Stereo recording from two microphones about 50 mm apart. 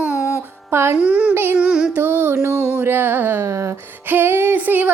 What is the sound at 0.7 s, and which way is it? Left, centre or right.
Speech, right.